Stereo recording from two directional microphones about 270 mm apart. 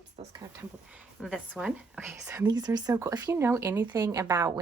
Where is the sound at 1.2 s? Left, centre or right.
Centre.